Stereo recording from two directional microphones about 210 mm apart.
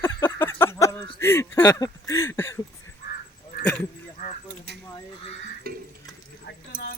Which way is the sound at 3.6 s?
5° left (ahead or behind).